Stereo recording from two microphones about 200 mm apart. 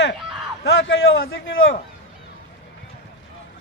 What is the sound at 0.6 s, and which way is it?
Speech, 70° left (ahead or behind).